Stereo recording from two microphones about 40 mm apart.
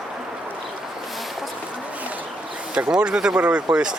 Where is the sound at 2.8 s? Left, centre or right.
Centre.